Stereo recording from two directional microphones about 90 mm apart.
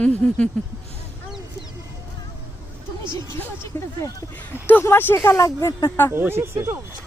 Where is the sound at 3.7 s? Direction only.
40° left (ahead or behind).